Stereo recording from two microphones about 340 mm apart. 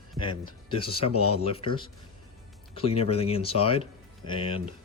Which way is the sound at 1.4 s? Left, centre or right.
Centre.